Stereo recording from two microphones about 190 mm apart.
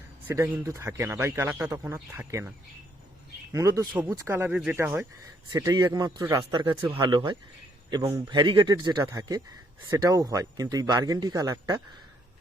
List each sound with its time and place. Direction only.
0.3 s speech: 10° right (ahead or behind)
3.5 s speech: 15° right (ahead or behind)